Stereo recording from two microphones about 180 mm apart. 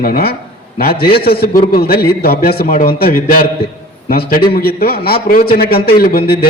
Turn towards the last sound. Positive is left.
turn(degrees=55)  # may be behind; listen again after turning